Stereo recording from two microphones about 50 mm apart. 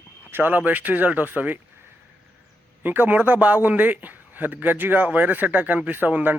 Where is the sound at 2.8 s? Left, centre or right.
Right.